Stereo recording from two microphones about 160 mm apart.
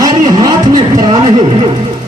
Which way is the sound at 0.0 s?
20° right (ahead or behind).